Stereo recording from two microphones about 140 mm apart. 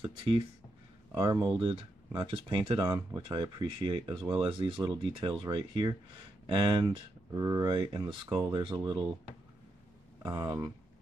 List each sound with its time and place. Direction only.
0.0 s speech: 40° right (ahead or behind)
10.2 s speech: 30° right (ahead or behind)